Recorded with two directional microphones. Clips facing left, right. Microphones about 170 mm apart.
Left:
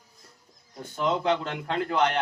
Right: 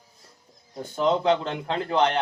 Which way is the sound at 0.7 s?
30° right (ahead or behind).